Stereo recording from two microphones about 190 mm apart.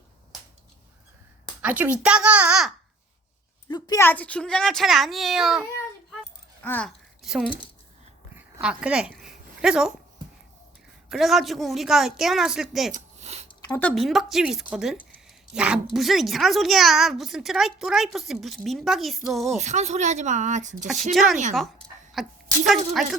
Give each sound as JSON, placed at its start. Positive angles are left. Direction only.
{"t": 1.6, "sound": "a child's voice", "side_deg": -10}
{"t": 3.7, "sound": "speech", "side_deg": 20}
{"t": 6.6, "sound": "a sound", "side_deg": 5}
{"t": 11.1, "sound": "speech", "side_deg": 0}
{"t": 12.9, "sound": "a sound", "side_deg": -35}
{"t": 13.7, "sound": "speech", "side_deg": 10}
{"t": 19.5, "sound": "speech", "side_deg": -35}
{"t": 21.1, "sound": "speech", "side_deg": 0}
{"t": 22.1, "sound": "a sound", "side_deg": 0}